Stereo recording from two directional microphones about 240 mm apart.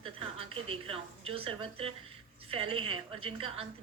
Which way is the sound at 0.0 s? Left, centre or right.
Right.